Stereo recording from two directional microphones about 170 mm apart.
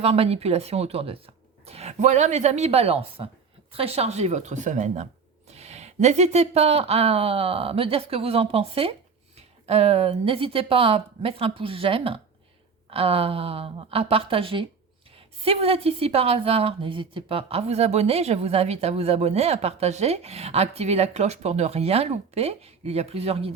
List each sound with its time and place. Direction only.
0.0 s a woman's voice: 35° right (ahead or behind)